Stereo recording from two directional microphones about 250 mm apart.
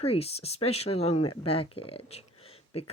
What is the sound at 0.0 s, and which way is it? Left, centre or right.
Speech, left.